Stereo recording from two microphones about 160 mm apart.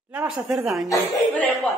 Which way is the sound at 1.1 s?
10° left (ahead or behind).